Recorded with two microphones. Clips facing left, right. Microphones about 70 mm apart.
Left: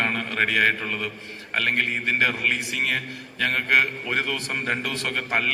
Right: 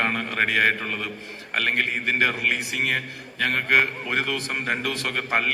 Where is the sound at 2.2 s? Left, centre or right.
Right.